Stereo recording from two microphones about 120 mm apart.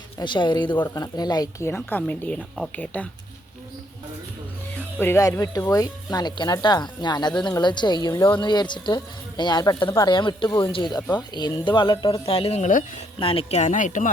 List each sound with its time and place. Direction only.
0.2 s speech: 40° left (ahead or behind)
1.6 s speech: 15° left (ahead or behind)
4.9 s speech: 20° left (ahead or behind); by 12.1 s 40° left (ahead or behind)
12.2 s speech: 50° left (ahead or behind); by 12.8 s 75° left (ahead or behind)
13.1 s speech: 50° left (ahead or behind)
13.6 s speech: 90° left